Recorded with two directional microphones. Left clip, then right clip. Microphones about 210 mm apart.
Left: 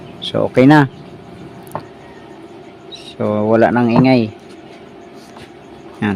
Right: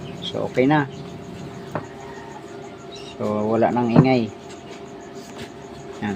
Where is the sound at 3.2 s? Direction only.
55° left (ahead or behind).